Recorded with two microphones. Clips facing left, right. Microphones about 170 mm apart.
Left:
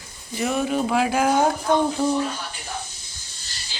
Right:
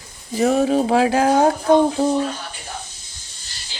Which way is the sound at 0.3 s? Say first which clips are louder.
Right 6 dB; 35° right (ahead or behind).